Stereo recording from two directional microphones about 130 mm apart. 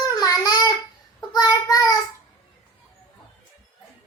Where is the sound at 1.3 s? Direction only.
30° left (ahead or behind).